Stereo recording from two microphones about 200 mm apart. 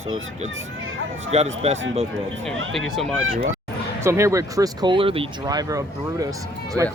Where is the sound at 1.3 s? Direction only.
35° right (ahead or behind).